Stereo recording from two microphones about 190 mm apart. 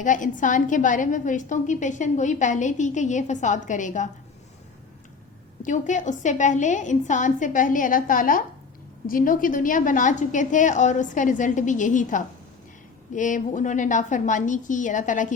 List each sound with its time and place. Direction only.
0.0 s a woman's voice: 45° left (ahead or behind)
5.6 s a woman's voice: 40° left (ahead or behind)